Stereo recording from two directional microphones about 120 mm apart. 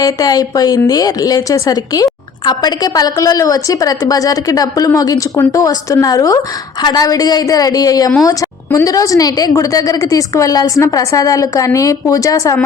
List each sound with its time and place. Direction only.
0.0 s a woman's voice: 30° left (ahead or behind)